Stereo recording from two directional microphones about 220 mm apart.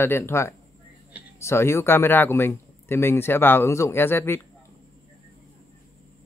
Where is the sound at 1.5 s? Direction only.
10° left (ahead or behind).